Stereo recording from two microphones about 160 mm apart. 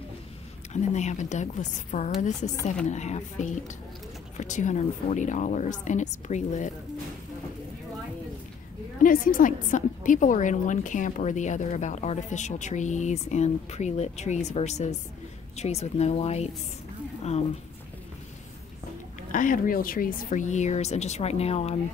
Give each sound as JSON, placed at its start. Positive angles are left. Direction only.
{"t": 0.7, "sound": "a woman's voice", "side_deg": 45}
{"t": 9.0, "sound": "a woman's voice", "side_deg": 60}
{"t": 19.3, "sound": "a woman's voice", "side_deg": 60}